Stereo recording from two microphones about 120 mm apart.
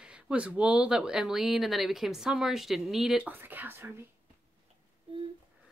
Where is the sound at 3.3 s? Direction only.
15° right (ahead or behind).